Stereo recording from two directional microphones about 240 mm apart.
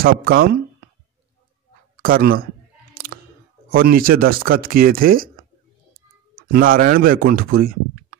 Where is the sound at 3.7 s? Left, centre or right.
Right.